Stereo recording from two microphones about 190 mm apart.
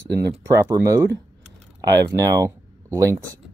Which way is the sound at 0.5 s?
15° right (ahead or behind).